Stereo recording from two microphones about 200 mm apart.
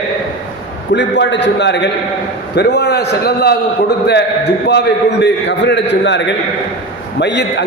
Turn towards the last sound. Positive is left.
turn(degrees=60)  # may be behind; listen again after turning